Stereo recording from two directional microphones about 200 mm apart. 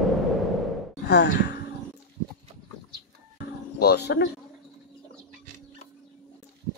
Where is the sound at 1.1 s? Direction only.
55° left (ahead or behind).